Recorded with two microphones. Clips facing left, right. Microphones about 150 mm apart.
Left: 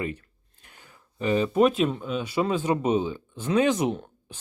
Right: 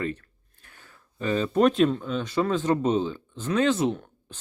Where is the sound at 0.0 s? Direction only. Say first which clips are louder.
Right 1 dB; 15° left (ahead or behind).